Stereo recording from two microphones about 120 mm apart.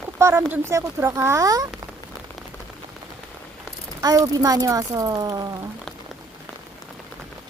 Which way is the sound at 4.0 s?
30° right (ahead or behind).